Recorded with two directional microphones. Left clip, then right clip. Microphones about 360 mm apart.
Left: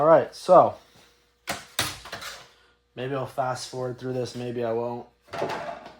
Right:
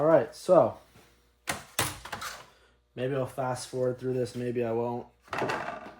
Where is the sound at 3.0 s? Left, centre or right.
Centre.